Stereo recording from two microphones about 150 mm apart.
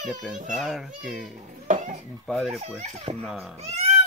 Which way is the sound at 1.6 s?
55° right (ahead or behind).